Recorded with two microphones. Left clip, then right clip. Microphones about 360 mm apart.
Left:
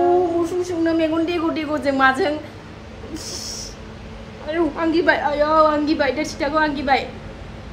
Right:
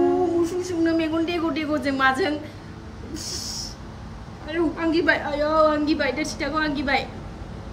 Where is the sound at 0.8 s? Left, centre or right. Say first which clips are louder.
Left 4 dB; centre.